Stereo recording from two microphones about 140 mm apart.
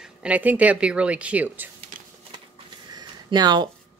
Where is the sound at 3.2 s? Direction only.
30° right (ahead or behind).